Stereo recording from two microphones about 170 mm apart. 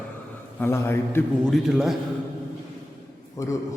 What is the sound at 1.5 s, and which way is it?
Speech, centre (ahead or behind).